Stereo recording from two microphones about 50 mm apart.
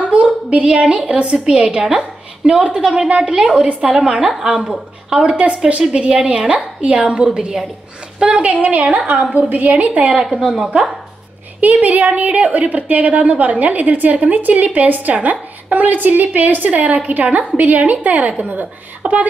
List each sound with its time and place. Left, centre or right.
0.0 s a woman's voice: right
5.3 s a woman's voice: right
10.4 s speech: centre
11.6 s a woman's voice: right